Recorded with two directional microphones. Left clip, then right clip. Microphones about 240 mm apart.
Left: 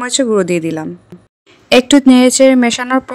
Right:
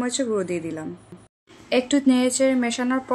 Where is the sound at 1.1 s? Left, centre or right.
Centre.